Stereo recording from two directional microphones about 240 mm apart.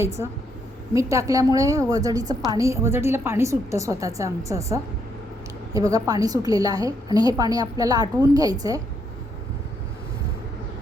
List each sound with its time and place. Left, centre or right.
0.0 s a woman's voice: centre